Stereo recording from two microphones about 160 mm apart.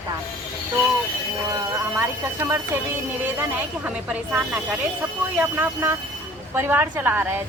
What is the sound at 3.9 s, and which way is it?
A woman's voice, 10° right (ahead or behind).